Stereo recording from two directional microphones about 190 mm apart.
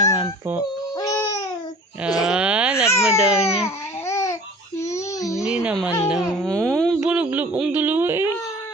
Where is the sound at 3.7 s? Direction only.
15° left (ahead or behind).